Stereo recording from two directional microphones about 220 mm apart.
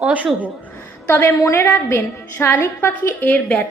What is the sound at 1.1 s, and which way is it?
A woman's voice, 10° left (ahead or behind).